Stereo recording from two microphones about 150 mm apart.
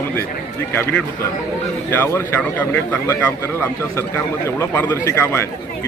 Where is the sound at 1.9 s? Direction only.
15° left (ahead or behind).